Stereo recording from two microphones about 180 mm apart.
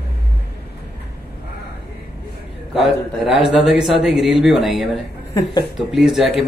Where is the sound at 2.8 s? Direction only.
Centre (ahead or behind).